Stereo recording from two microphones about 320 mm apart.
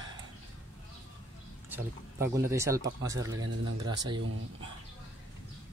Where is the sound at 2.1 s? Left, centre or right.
Centre.